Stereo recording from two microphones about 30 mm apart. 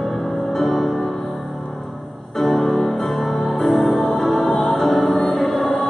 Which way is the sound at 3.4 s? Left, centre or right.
Centre.